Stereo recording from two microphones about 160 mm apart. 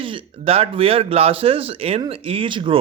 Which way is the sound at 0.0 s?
30° right (ahead or behind).